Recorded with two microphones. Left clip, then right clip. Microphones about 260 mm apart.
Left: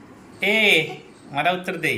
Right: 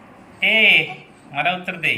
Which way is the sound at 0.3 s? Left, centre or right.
Centre.